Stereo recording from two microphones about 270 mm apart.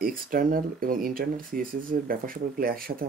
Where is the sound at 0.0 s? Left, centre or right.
Right.